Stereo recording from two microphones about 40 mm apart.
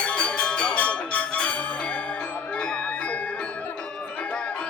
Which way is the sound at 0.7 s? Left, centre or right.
Left.